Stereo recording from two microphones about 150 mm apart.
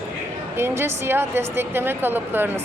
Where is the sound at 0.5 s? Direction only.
15° right (ahead or behind).